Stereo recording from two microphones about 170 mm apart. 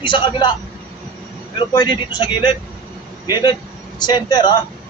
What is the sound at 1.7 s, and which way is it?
Speech, 25° left (ahead or behind).